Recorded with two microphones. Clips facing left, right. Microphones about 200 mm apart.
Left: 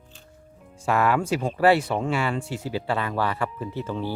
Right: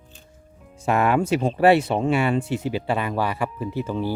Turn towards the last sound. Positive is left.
turn(degrees=-15)  # may be behind; listen again after turning